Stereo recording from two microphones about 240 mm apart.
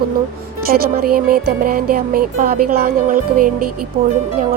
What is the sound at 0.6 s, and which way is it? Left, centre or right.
Music, right.